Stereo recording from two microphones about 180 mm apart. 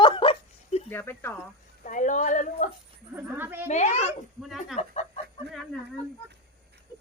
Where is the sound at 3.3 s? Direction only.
10° right (ahead or behind).